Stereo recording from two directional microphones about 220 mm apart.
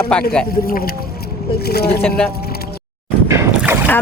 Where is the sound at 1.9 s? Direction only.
5° left (ahead or behind).